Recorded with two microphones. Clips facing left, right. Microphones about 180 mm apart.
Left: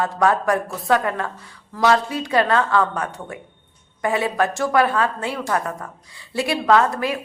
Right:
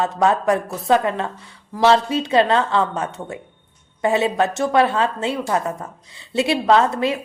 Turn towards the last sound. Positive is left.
turn(degrees=-25)  # may be behind; listen again after turning